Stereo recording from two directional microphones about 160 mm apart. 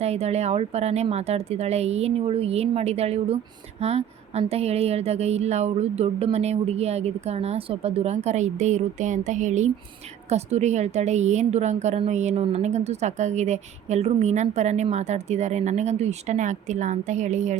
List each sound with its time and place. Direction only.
0.0 s a woman's voice: 40° right (ahead or behind)